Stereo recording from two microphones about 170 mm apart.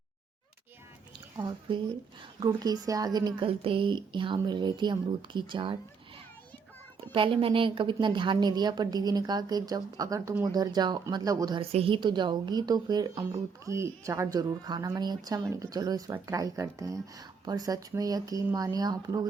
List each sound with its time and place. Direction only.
2.6 s a woman's voice: 20° right (ahead or behind)
7.1 s a woman's voice: 30° right (ahead or behind)
11.6 s a woman's voice: 35° right (ahead or behind)